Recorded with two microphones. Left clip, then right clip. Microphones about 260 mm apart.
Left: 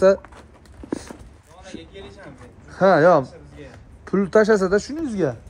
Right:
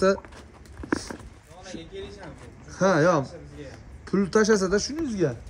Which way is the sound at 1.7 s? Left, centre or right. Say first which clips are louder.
Right 1 dB; left.